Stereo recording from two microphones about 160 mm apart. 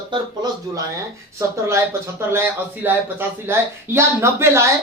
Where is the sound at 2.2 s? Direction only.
15° right (ahead or behind).